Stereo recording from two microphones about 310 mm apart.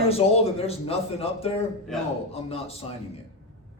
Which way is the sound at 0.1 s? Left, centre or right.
Centre.